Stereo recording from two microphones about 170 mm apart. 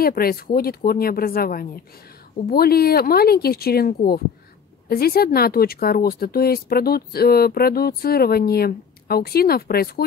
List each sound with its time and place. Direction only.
0.0 s speech: 60° left (ahead or behind)